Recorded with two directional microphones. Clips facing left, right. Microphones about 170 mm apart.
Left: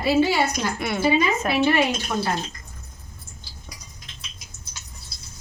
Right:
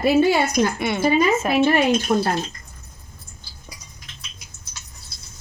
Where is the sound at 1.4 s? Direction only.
45° right (ahead or behind).